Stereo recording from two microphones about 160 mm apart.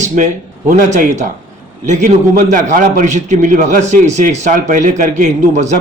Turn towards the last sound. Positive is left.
turn(degrees=-50)  # may be behind; listen again after turning